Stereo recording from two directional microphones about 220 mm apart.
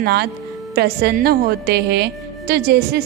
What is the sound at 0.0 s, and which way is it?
A woman's voice, 45° right (ahead or behind).